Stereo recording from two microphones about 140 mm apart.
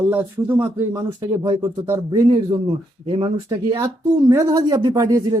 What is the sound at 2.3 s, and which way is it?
Speech, 35° right (ahead or behind).